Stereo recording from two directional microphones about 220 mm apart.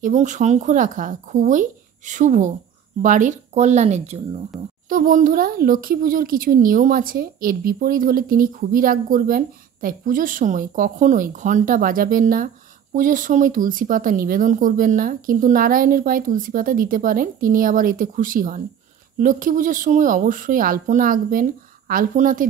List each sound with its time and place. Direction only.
0.0 s speech: 35° right (ahead or behind)